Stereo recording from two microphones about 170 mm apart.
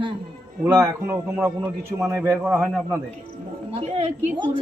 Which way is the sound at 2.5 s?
5° right (ahead or behind).